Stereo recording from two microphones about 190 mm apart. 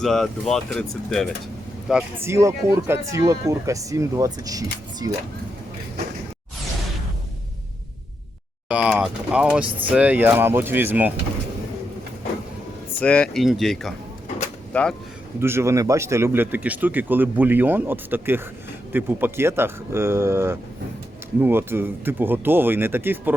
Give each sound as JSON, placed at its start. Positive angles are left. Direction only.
{"t": 0.0, "sound": "speech", "side_deg": 0}
{"t": 1.9, "sound": "speech", "side_deg": -10}
{"t": 8.7, "sound": "speech", "side_deg": -5}
{"t": 13.0, "sound": "speech", "side_deg": 5}
{"t": 15.4, "sound": "speech", "side_deg": -15}